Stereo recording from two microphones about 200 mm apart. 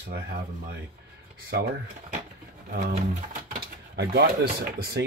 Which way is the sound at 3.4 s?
55° right (ahead or behind).